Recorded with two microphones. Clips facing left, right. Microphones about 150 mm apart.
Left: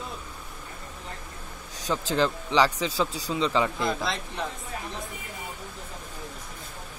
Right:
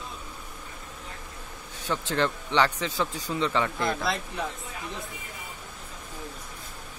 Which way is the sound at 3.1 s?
35° left (ahead or behind).